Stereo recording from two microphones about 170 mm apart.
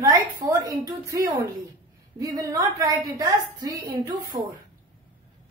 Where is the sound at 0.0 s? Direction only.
20° right (ahead or behind).